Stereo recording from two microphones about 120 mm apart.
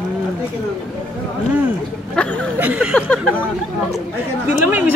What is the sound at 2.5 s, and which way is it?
Speech, 10° right (ahead or behind).